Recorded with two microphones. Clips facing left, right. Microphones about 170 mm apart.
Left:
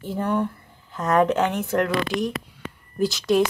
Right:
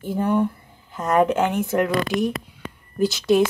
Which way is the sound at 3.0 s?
Centre (ahead or behind).